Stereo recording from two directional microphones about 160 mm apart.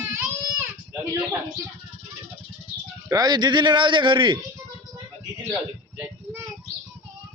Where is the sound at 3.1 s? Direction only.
25° right (ahead or behind).